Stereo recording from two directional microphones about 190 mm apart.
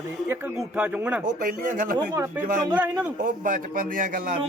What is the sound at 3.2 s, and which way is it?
A man's voice, 45° right (ahead or behind).